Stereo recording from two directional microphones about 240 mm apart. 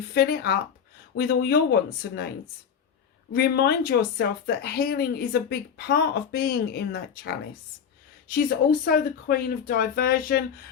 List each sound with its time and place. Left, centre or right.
0.1 s speech: left
3.3 s speech: left